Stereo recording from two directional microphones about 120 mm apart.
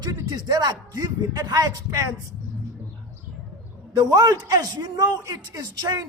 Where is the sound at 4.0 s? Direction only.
35° right (ahead or behind).